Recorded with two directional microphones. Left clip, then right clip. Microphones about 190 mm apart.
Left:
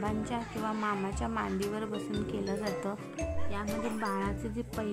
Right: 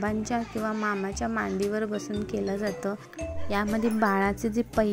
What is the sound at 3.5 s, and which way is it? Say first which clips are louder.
Speech: right 11 dB; 35° right (ahead or behind).